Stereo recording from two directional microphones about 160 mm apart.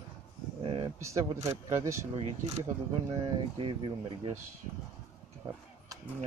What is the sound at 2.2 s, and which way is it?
Speech, 40° right (ahead or behind).